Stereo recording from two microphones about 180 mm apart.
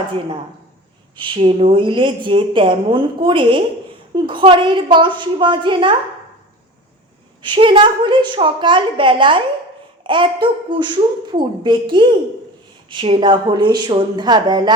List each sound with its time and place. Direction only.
1.1 s a woman's voice: 30° right (ahead or behind)
7.4 s a woman's voice: 25° right (ahead or behind)